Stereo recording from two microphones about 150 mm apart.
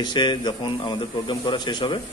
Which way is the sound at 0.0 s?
30° left (ahead or behind).